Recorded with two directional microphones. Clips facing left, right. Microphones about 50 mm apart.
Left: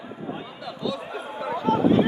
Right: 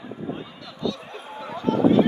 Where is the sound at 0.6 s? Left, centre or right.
Centre.